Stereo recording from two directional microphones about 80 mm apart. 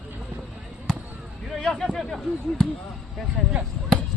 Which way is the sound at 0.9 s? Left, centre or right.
Centre.